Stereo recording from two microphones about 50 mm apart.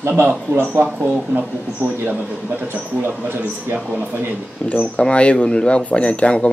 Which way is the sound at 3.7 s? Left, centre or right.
Right.